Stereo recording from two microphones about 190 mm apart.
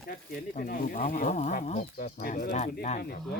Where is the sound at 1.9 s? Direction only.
50° left (ahead or behind).